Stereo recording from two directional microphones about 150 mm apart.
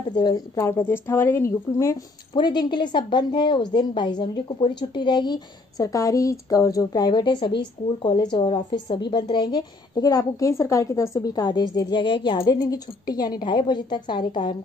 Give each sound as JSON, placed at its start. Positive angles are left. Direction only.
{"t": 0.1, "sound": "a woman's voice", "side_deg": 25}
{"t": 2.3, "sound": "a woman's voice", "side_deg": 30}